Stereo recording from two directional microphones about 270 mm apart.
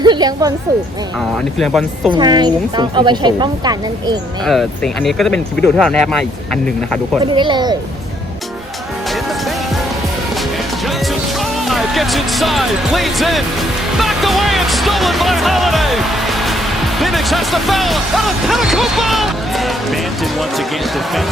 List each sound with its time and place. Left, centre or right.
0.0 s speech: centre
1.5 s speech: centre
2.1 s speech: centre
4.4 s speech: centre
7.3 s speech: centre
11.7 s speech: centre
14.0 s music: centre
17.0 s speech: centre